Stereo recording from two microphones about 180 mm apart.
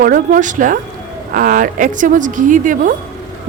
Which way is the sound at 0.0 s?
50° right (ahead or behind).